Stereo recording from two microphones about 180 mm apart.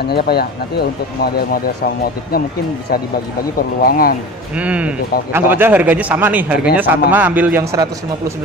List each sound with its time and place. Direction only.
0.1 s speech: 60° left (ahead or behind)
3.8 s speech: 55° left (ahead or behind)
4.6 s a man's voice: 5° right (ahead or behind)